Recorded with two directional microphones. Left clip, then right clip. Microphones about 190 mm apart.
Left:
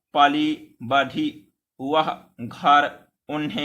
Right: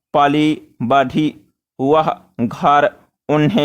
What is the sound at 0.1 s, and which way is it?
Speech, 50° right (ahead or behind).